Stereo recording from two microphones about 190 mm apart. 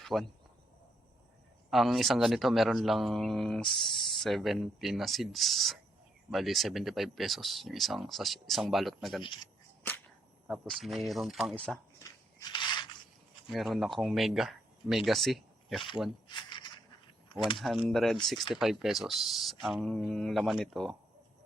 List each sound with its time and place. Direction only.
0.0 s speech: centre (ahead or behind)
1.7 s speech: centre (ahead or behind)
9.2 s speech: 25° left (ahead or behind)
10.4 s speech: centre (ahead or behind)
12.5 s a sound: 25° left (ahead or behind)
13.5 s speech: centre (ahead or behind)
16.3 s a sound: 25° left (ahead or behind)
17.6 s speech: centre (ahead or behind)